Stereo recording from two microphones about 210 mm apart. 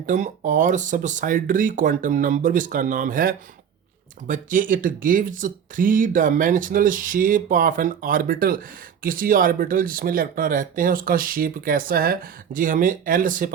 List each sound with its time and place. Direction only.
0.0 s speech: 35° right (ahead or behind)